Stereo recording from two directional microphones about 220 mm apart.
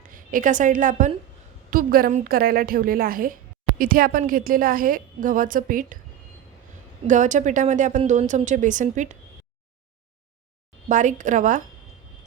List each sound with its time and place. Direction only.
0.1 s a woman's voice: 40° right (ahead or behind)
7.1 s speech: 35° right (ahead or behind)
10.8 s speech: 35° right (ahead or behind)